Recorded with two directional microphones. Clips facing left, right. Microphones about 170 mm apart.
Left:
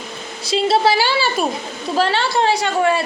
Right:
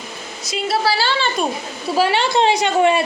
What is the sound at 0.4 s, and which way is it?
Speech, 25° left (ahead or behind).